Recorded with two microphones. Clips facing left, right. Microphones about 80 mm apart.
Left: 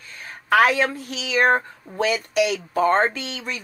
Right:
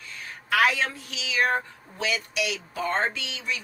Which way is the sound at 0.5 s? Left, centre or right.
Left.